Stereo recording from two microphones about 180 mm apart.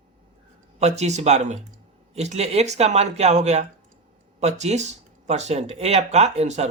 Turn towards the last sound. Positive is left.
turn(degrees=-40)  # may be behind; listen again after turning